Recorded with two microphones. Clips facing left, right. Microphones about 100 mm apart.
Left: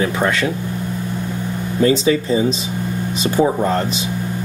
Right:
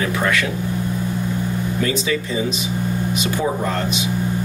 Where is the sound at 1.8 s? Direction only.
30° left (ahead or behind).